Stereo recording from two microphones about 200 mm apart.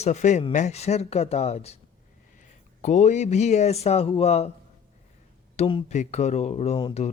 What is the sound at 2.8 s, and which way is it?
Speech, 35° left (ahead or behind).